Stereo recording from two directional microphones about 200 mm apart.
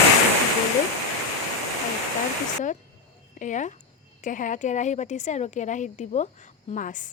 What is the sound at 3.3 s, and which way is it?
A woman's voice, 40° left (ahead or behind).